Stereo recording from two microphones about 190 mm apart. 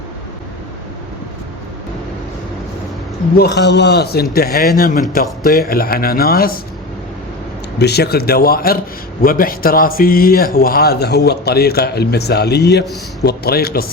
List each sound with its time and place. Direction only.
3.3 s a man's voice: 60° left (ahead or behind)
7.8 s a man's voice: 60° left (ahead or behind)